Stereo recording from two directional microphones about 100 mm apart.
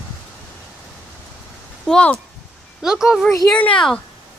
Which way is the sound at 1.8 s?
10° left (ahead or behind).